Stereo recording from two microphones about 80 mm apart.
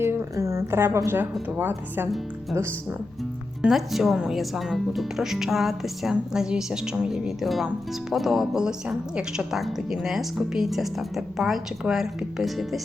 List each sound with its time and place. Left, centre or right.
0.0 s speech: right
3.7 s a woman's voice: centre